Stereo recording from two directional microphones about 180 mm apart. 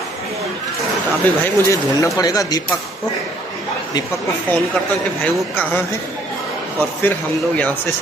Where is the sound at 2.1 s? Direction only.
20° left (ahead or behind).